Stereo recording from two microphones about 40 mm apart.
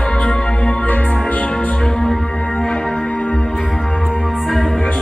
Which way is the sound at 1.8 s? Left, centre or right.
Centre.